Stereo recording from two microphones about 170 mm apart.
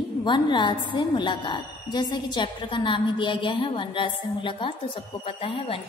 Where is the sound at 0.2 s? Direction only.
25° left (ahead or behind).